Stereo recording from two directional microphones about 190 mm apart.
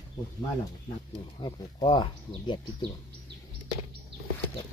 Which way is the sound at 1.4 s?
25° left (ahead or behind).